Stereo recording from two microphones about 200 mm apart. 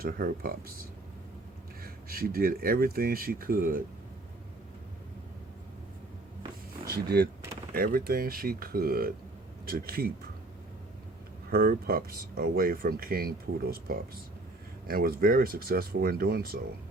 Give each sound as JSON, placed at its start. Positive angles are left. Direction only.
{"t": 0.0, "sound": "speech", "side_deg": -45}
{"t": 1.8, "sound": "speech", "side_deg": -50}
{"t": 6.8, "sound": "speech", "side_deg": -50}
{"t": 11.5, "sound": "speech", "side_deg": -50}